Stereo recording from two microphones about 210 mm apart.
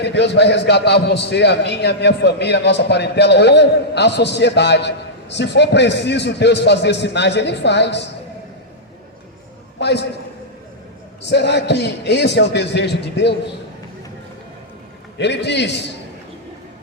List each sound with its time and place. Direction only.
0.0 s a man's voice: 55° left (ahead or behind)
9.8 s a man's voice: 55° left (ahead or behind)
11.2 s a man's voice: 55° left (ahead or behind)
15.2 s a man's voice: 55° left (ahead or behind)